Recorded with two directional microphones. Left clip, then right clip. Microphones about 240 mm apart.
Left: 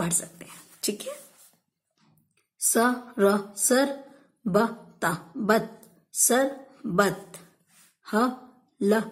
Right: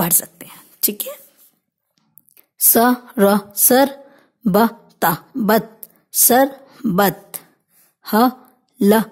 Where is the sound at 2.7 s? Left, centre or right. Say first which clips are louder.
Right 8 dB; right.